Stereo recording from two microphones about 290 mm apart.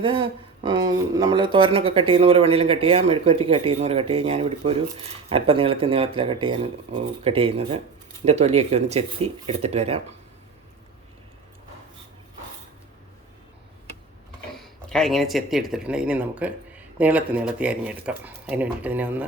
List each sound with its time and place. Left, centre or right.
0.0 s speech: centre
14.6 s speech: centre